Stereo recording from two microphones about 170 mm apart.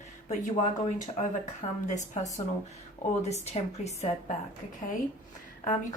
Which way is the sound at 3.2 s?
40° left (ahead or behind).